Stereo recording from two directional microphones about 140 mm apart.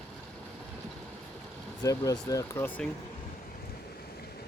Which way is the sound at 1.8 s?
25° left (ahead or behind).